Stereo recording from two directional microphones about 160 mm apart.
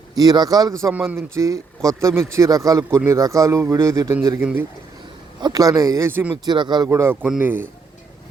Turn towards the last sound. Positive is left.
turn(degrees=-10)  # may be behind; listen again after turning